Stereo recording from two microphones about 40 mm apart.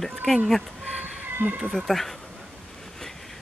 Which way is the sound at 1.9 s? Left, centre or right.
Centre.